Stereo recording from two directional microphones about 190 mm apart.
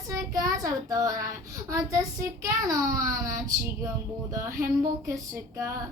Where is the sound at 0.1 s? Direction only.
15° right (ahead or behind).